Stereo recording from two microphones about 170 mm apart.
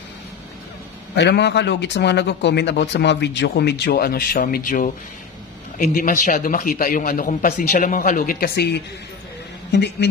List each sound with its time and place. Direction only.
1.1 s a woman's voice: 85° left